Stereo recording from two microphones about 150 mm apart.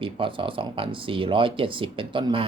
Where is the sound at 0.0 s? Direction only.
35° right (ahead or behind).